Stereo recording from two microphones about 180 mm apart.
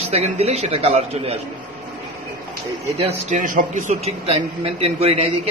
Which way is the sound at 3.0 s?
45° right (ahead or behind).